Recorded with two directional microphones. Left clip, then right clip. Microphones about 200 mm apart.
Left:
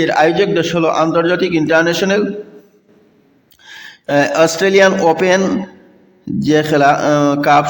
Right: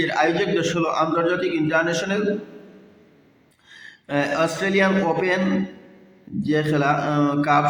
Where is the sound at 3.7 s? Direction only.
45° left (ahead or behind).